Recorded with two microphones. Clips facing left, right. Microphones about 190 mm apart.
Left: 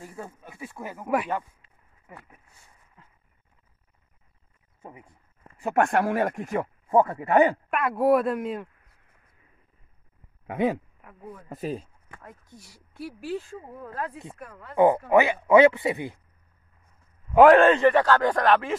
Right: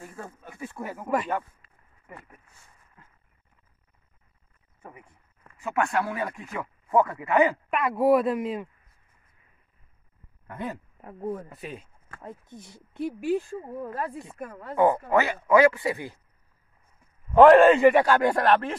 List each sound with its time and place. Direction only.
0.0 s speech: 15° left (ahead or behind)
4.8 s speech: 25° left (ahead or behind); by 6.7 s 45° left (ahead or behind)
6.9 s speech: 30° left (ahead or behind)
7.7 s speech: centre (ahead or behind)
10.4 s speech: 85° left
11.0 s speech: 40° right (ahead or behind)
11.4 s speech: 40° left (ahead or behind)
12.2 s speech: 20° right (ahead or behind)
14.8 s speech: 20° left (ahead or behind)
17.3 s a man's voice: 5° left (ahead or behind)
17.6 s speech: 10° right (ahead or behind)